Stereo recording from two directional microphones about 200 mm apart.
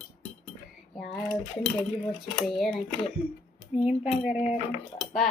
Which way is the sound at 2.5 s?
Centre (ahead or behind).